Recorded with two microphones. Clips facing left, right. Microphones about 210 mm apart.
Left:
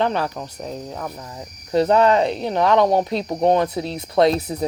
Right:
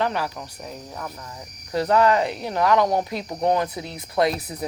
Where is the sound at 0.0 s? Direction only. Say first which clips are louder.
Left 4 dB; 25° left (ahead or behind).